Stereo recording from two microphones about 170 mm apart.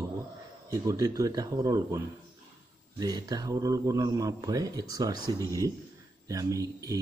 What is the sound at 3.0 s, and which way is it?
Speech, 20° right (ahead or behind).